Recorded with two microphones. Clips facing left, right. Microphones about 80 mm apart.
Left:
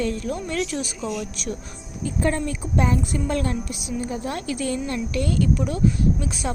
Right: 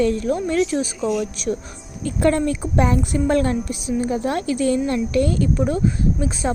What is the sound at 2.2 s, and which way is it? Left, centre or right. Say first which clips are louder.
A woman's voice: right 6 dB; right.